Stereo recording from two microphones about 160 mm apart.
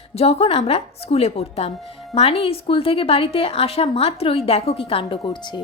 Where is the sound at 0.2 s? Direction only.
40° left (ahead or behind).